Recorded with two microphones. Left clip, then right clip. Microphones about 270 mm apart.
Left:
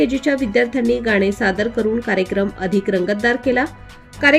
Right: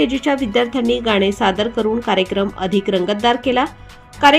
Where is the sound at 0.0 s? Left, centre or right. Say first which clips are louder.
Even; centre.